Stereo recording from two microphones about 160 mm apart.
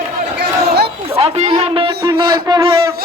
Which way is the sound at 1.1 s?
40° right (ahead or behind).